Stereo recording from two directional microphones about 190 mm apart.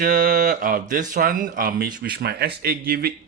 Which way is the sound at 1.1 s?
45° right (ahead or behind).